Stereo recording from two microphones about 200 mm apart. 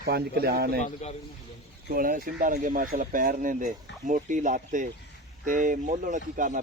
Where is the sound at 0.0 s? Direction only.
50° right (ahead or behind).